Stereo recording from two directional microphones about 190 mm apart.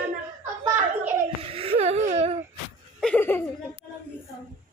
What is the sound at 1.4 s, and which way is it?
Whimper, 30° right (ahead or behind).